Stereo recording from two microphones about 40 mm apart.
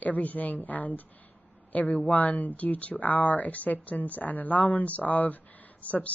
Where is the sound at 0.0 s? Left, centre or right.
Left.